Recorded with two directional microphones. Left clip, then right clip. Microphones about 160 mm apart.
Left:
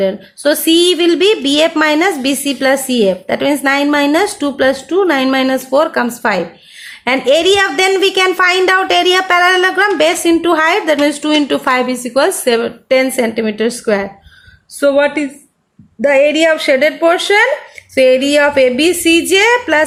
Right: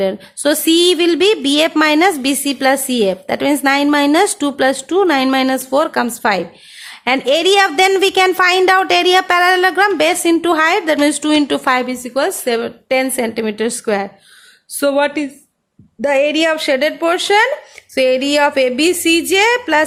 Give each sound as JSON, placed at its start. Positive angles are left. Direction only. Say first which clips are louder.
{"t": 0.0, "sound": "a woman's voice", "louder": "left 2 dB", "side_deg": -25}